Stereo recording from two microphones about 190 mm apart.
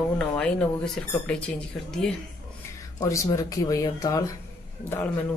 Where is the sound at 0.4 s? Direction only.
5° left (ahead or behind).